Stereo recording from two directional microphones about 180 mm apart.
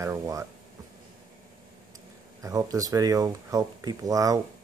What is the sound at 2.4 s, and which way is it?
Speech, 20° right (ahead or behind).